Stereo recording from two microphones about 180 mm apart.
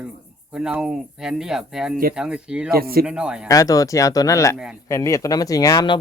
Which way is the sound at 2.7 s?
55° right (ahead or behind).